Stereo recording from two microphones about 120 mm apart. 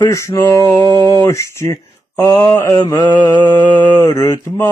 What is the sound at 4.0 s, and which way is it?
Male singing, 25° left (ahead or behind).